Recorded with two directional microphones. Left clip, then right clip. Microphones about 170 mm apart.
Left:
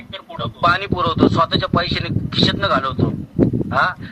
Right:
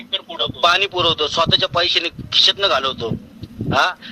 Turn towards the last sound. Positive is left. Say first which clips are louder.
# even
turn(degrees=-30)  # may be behind; listen again after turning